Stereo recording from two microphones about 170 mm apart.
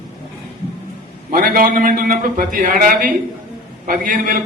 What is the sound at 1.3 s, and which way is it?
A man's voice, 55° right (ahead or behind).